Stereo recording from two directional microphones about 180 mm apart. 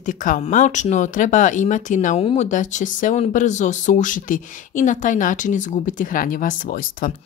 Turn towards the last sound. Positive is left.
turn(degrees=50)  # may be behind; listen again after turning